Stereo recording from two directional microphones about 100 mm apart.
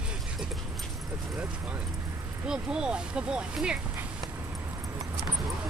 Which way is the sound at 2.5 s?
10° right (ahead or behind).